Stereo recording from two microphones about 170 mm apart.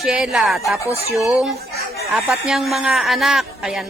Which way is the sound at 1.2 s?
Centre (ahead or behind).